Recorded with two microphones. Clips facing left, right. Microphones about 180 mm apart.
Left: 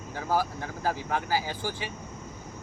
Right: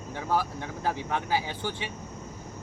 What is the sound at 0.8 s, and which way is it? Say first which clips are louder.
Speech: left 1 dB; 25° right (ahead or behind).